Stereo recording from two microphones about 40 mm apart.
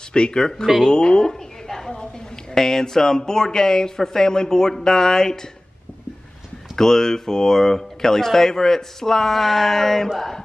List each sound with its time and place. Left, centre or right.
0.1 s a woman's voice: left
6.7 s speech: centre
10.1 s mantra: centre